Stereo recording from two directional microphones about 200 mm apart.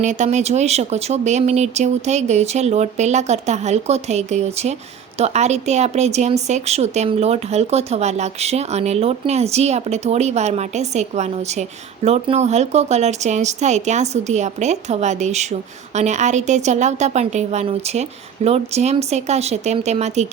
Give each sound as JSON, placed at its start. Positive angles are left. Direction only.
{"t": 0.0, "sound": "speech", "side_deg": -35}